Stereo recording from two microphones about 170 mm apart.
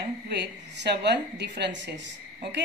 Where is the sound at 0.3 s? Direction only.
80° right.